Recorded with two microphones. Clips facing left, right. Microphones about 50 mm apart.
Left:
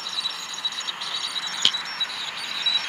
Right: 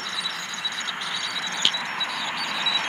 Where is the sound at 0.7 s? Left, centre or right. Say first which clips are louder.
Right 3 dB; right.